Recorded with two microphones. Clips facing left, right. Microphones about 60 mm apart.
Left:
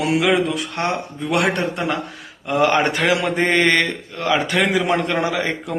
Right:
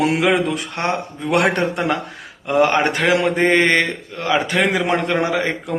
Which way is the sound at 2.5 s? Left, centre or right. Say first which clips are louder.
Right 1 dB; right.